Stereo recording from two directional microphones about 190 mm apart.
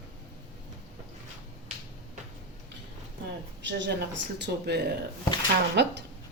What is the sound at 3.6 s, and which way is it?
Speech, 70° right (ahead or behind).